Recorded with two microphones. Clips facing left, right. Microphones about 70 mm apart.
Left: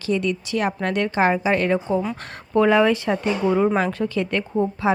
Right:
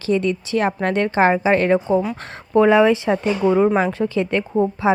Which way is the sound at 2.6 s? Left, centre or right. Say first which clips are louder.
Right 3 dB; right.